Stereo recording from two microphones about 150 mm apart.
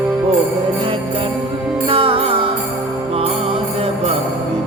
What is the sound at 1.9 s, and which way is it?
Music, 40° right (ahead or behind).